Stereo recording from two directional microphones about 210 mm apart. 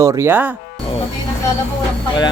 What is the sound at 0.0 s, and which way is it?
Speech, 15° right (ahead or behind).